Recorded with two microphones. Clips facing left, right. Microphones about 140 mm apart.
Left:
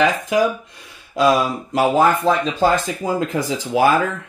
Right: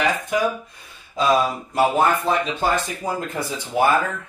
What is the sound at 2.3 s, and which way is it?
Speech, 90° left.